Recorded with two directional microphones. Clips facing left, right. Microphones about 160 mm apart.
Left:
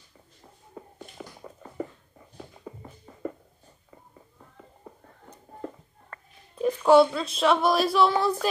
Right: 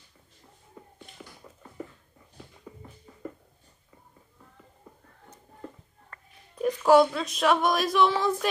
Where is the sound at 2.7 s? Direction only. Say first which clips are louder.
Left 4 dB; 65° left (ahead or behind).